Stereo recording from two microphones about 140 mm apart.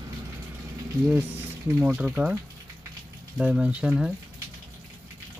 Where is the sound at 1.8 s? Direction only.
10° right (ahead or behind).